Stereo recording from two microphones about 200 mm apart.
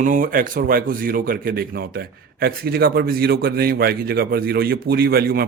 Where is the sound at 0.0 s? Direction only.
40° right (ahead or behind).